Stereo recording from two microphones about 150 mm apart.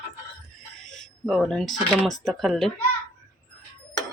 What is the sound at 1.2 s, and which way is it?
Speech, centre (ahead or behind).